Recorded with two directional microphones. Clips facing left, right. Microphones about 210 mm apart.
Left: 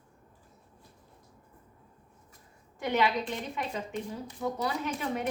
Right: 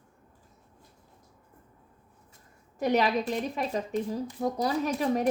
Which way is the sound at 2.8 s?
40° right (ahead or behind).